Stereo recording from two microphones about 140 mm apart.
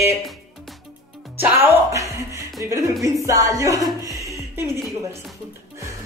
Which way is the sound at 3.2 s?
25° right (ahead or behind).